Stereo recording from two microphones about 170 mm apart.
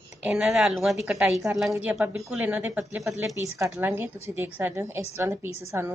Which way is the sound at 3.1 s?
15° right (ahead or behind).